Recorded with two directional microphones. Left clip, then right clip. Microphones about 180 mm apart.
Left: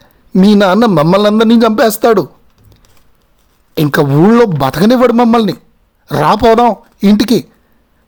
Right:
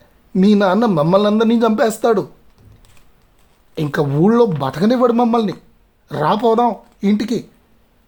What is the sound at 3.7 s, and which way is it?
A man's voice, 40° left (ahead or behind).